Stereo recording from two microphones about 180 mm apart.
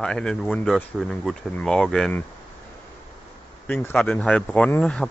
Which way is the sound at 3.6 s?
10° left (ahead or behind).